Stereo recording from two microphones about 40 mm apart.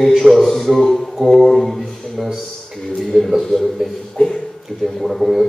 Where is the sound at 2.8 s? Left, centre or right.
Centre.